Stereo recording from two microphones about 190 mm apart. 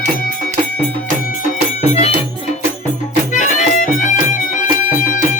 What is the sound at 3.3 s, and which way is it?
Music, 40° left (ahead or behind).